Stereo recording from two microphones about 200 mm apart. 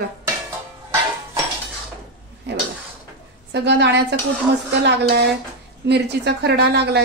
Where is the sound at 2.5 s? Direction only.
55° right (ahead or behind).